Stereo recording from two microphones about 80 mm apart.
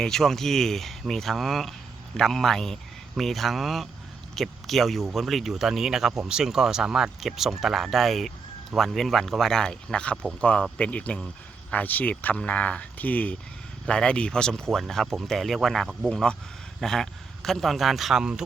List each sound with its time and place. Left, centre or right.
0.0 s speech: centre